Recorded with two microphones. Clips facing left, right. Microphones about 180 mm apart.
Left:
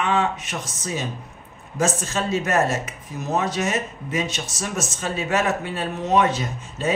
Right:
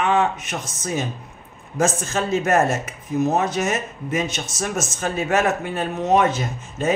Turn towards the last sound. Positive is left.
turn(degrees=-50)  # may be behind; listen again after turning